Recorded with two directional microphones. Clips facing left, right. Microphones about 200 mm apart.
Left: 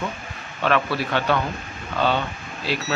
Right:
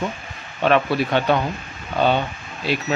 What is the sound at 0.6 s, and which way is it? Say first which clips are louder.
Speech: right 4 dB; 20° right (ahead or behind).